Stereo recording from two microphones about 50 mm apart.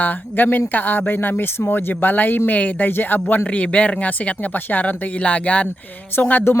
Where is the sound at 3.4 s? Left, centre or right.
Left.